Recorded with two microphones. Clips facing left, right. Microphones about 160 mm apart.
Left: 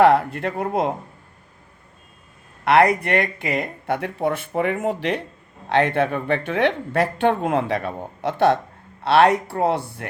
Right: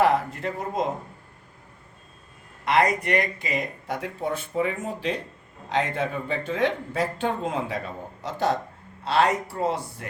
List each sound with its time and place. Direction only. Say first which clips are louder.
0.0 s speech: left 6 dB; 65° left (ahead or behind)
2.6 s speech: left 5 dB; 65° left (ahead or behind)